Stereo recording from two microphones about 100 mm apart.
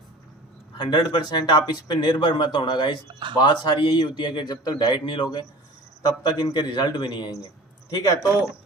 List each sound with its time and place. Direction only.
0.8 s speech: 50° left (ahead or behind)
3.1 s speech: 50° right (ahead or behind)
3.4 s speech: 45° left (ahead or behind)